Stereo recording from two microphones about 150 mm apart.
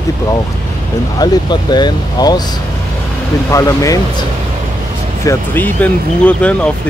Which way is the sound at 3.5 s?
20° left (ahead or behind).